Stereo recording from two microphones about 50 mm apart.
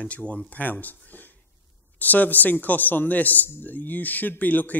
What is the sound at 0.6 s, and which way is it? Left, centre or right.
Speech, left.